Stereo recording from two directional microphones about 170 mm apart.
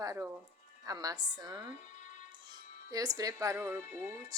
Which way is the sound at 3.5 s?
10° right (ahead or behind).